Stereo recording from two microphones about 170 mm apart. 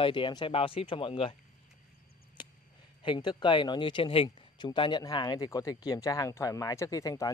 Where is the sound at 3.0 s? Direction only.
25° left (ahead or behind).